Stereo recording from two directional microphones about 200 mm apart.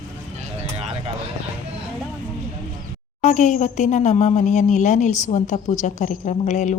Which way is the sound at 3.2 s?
40° left (ahead or behind).